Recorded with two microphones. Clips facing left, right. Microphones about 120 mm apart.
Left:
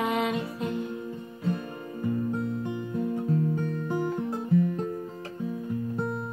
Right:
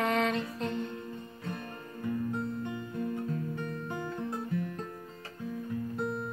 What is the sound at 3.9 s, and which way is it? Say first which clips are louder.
Music: left 9 dB; 20° left (ahead or behind).